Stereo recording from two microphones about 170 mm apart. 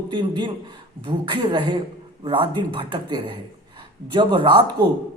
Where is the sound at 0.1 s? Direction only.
30° right (ahead or behind).